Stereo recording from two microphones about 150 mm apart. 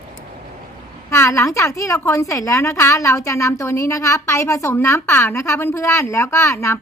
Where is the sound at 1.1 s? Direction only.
20° left (ahead or behind).